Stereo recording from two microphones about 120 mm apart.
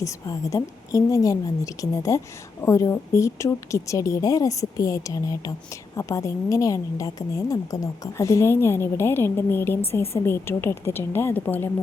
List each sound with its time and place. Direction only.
0.0 s a woman's voice: 25° left (ahead or behind)